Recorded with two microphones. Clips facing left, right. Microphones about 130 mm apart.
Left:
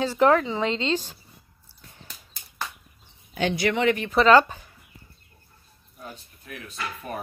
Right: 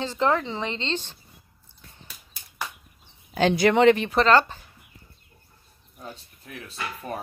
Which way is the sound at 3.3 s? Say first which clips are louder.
Right 5 dB; 35° right (ahead or behind).